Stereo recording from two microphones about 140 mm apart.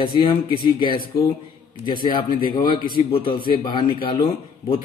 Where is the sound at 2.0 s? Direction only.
35° left (ahead or behind).